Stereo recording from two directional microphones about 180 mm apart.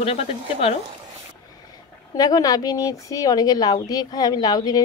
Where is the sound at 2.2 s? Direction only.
20° left (ahead or behind).